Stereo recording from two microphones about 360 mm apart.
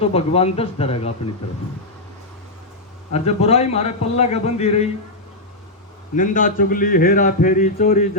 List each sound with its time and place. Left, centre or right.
0.0 s a man's voice: centre
3.1 s a man's voice: centre
6.1 s a man's voice: left